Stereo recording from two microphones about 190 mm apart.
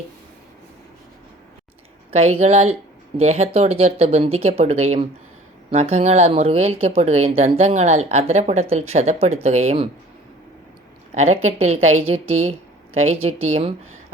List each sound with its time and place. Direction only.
2.0 s speech: 35° right (ahead or behind)
11.1 s speech: 35° right (ahead or behind)